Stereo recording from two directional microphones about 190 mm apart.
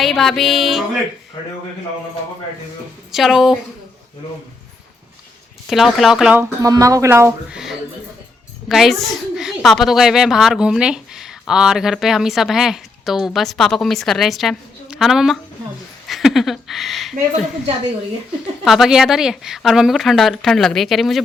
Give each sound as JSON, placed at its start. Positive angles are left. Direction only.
{"t": 0.0, "sound": "a woman's voice", "side_deg": 0}
{"t": 3.1, "sound": "a woman's voice", "side_deg": 0}
{"t": 5.6, "sound": "speech", "side_deg": 0}
{"t": 8.7, "sound": "a woman's voice", "side_deg": 0}
{"t": 18.6, "sound": "a woman's voice", "side_deg": 0}